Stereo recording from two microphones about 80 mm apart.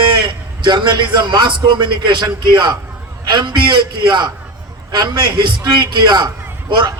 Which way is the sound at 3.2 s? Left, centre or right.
Right.